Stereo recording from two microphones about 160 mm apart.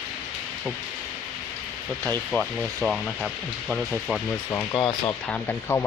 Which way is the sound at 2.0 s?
10° left (ahead or behind).